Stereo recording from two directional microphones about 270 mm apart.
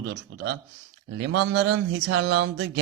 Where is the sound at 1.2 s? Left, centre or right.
Right.